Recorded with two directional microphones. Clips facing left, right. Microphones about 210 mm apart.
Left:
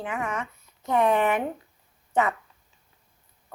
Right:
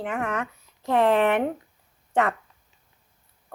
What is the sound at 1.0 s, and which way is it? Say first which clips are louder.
Speech: right 2 dB; 90° right.